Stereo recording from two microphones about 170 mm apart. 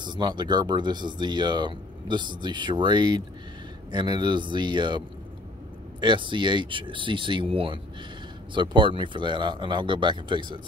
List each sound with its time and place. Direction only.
0.0 s speech: 25° right (ahead or behind)